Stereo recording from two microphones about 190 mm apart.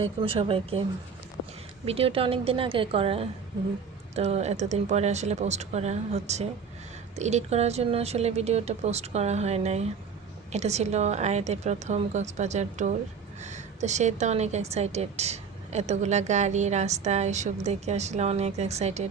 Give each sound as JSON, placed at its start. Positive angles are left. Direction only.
{"t": 0.0, "sound": "a woman's voice", "side_deg": -30}